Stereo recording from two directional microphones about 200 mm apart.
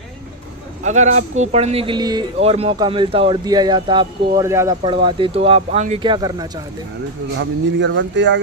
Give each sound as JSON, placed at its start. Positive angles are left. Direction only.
{"t": 0.9, "sound": "a man's voice", "side_deg": -35}
{"t": 4.8, "sound": "a man's voice", "side_deg": -25}
{"t": 6.1, "sound": "a man's voice", "side_deg": -20}
{"t": 7.3, "sound": "speech", "side_deg": -65}